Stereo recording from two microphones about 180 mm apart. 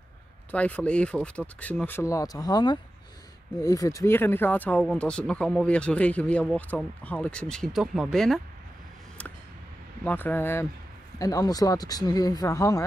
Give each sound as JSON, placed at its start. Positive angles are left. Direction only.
{"t": 0.5, "sound": "speech", "side_deg": 10}
{"t": 10.0, "sound": "speech", "side_deg": 10}